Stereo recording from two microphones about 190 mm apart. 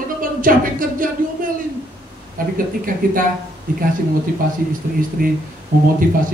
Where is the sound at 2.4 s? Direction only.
45° right (ahead or behind).